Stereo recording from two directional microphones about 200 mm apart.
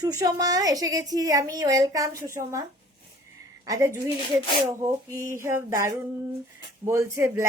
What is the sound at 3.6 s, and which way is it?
A woman's voice, 15° right (ahead or behind).